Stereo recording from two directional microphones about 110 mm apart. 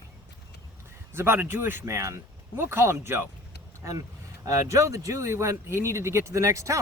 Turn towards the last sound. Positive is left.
turn(degrees=-30)  # may be behind; listen again after turning